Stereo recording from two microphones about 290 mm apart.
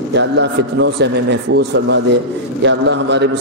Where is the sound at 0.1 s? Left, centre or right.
Right.